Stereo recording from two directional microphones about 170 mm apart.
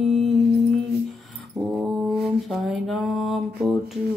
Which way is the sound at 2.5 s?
Centre (ahead or behind).